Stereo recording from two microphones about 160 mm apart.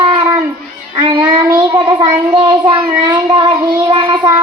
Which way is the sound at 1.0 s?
30° right (ahead or behind).